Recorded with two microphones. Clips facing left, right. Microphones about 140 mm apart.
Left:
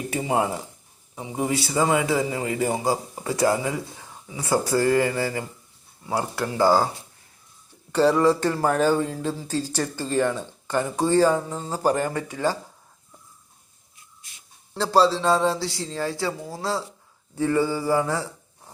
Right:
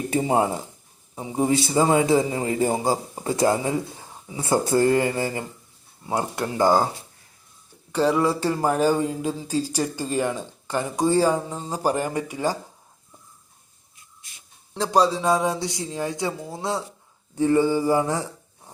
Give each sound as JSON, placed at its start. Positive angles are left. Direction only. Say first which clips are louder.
{"t": 0.1, "sound": "speech", "louder": "right 3 dB", "side_deg": -30}
{"t": 7.9, "sound": "speech", "louder": "left 2 dB", "side_deg": -10}
{"t": 14.8, "sound": "speech", "louder": "left 1 dB", "side_deg": -15}
{"t": 17.3, "sound": "speech", "louder": "right 3 dB", "side_deg": -20}